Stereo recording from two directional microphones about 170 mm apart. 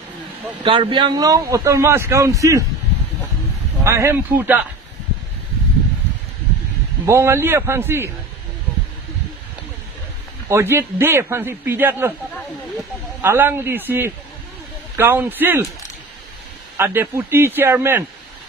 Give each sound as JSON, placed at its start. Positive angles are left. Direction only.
{"t": 0.7, "sound": "a man's voice", "side_deg": -30}
{"t": 3.8, "sound": "a man's voice", "side_deg": -15}
{"t": 7.1, "sound": "a man's voice", "side_deg": -15}
{"t": 10.5, "sound": "a man's voice", "side_deg": -15}
{"t": 13.2, "sound": "a man's voice", "side_deg": -15}
{"t": 16.7, "sound": "a man's voice", "side_deg": -15}